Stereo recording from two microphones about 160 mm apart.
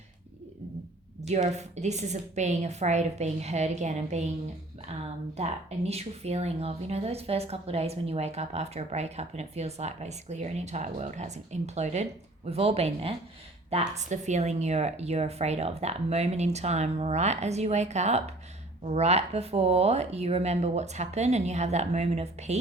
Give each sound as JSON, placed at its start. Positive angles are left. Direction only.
{"t": 1.3, "sound": "speech", "side_deg": -45}
{"t": 5.4, "sound": "speech", "side_deg": -40}